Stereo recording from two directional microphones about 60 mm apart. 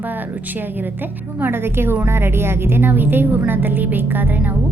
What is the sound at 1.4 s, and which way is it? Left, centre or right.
Speech, right.